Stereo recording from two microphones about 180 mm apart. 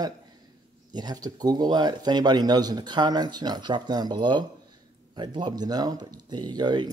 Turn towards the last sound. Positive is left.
turn(degrees=-25)  # may be behind; listen again after turning